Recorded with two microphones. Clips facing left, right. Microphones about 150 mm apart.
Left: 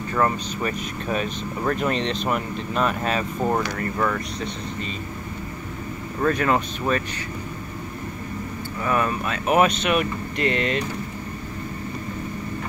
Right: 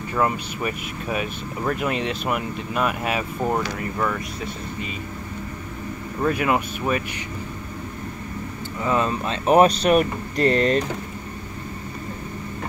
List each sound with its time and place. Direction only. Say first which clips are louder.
0.1 s speech: even; 10° right (ahead or behind)
6.2 s speech: even; 10° right (ahead or behind)
8.8 s speech: right 1 dB; 20° right (ahead or behind); by 10.8 s 40° right (ahead or behind)